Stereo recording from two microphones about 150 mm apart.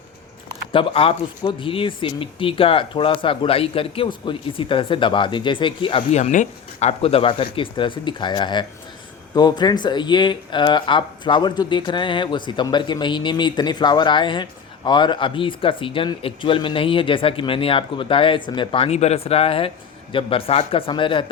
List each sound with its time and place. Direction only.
0.7 s speech: 35° left (ahead or behind)
6.1 s speech: 50° left (ahead or behind); by 21.2 s 35° left (ahead or behind)